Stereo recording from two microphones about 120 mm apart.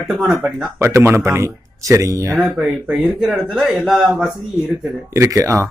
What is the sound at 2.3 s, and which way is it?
Speech, 15° right (ahead or behind).